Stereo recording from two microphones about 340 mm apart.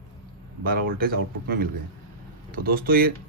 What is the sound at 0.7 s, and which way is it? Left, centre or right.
A man's voice, right.